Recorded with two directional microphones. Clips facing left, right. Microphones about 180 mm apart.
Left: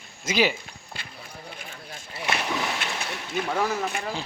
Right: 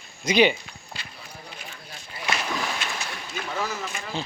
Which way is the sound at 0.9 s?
55° left (ahead or behind).